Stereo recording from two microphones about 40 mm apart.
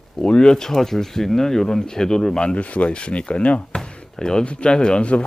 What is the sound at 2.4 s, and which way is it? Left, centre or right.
Speech, left.